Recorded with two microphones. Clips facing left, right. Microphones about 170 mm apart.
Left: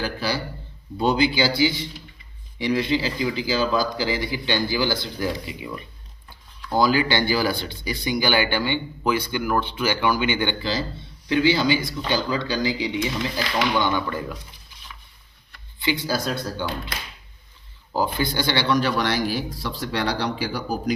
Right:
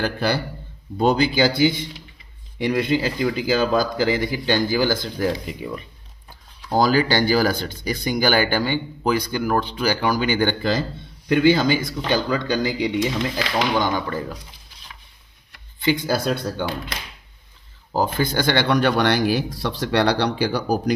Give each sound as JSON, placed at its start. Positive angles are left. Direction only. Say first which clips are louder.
{"t": 0.0, "sound": "speech", "louder": "right 4 dB", "side_deg": -60}
{"t": 0.9, "sound": "speech", "louder": "right 2 dB", "side_deg": -45}
{"t": 6.7, "sound": "speech", "louder": "right 2 dB", "side_deg": -45}
{"t": 13.7, "sound": "speech", "louder": "right 1 dB", "side_deg": -40}
{"t": 15.8, "sound": "speech", "louder": "right 4 dB", "side_deg": -50}
{"t": 17.9, "sound": "speech", "louder": "right 2 dB", "side_deg": -45}